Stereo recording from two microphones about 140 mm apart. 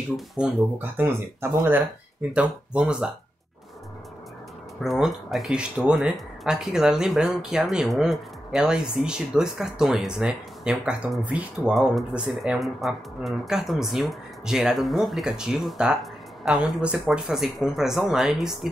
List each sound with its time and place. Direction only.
0.4 s speech: 15° right (ahead or behind)
4.8 s speech: centre (ahead or behind)